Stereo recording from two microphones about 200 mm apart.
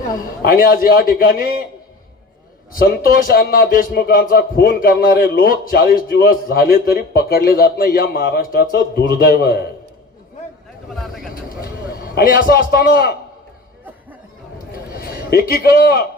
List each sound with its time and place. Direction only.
0.4 s speech: 50° left (ahead or behind)
2.7 s speech: 50° left (ahead or behind)
10.9 s speech: centre (ahead or behind)
12.0 s speech: 45° left (ahead or behind)
15.0 s a man's voice: 50° left (ahead or behind)